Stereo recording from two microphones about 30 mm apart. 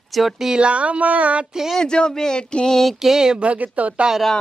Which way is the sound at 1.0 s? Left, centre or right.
Right.